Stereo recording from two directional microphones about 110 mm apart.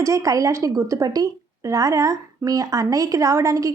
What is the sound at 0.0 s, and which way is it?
A woman's voice, 30° right (ahead or behind).